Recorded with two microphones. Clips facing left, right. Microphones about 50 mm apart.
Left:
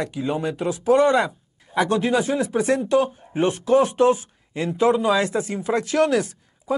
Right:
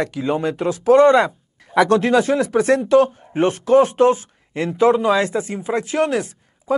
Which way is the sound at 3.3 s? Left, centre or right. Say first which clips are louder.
Right 4 dB; right.